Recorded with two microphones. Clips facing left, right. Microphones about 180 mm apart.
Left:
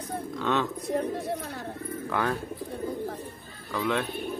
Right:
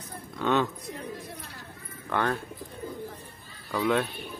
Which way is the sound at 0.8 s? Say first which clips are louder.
Left 10 dB; 60° left (ahead or behind).